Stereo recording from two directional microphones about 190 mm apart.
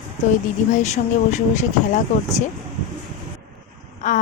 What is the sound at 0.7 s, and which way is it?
A woman's voice, 40° left (ahead or behind).